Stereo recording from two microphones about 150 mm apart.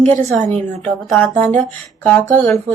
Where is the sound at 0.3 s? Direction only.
55° right (ahead or behind).